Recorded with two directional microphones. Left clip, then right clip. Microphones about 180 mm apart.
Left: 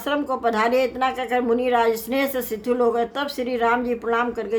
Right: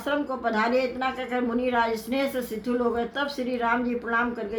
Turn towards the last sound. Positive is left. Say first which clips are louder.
# left 4 dB
turn(degrees=50)  # may be behind; listen again after turning